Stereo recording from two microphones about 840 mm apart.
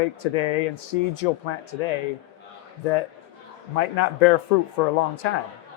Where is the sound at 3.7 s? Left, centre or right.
Left.